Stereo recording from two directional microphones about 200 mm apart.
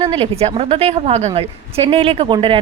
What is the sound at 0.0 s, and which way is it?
A woman's voice, 30° right (ahead or behind).